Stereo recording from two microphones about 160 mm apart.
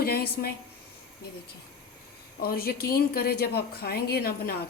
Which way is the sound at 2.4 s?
70° left (ahead or behind).